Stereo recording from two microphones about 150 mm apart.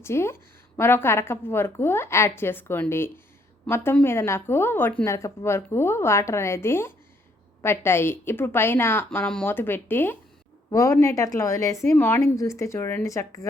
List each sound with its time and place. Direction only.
0.0 s a woman's voice: 15° left (ahead or behind)